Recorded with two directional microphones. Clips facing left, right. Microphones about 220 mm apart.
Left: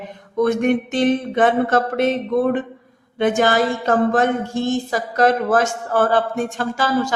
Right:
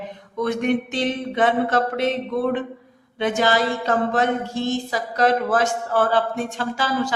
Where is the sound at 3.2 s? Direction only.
50° left (ahead or behind).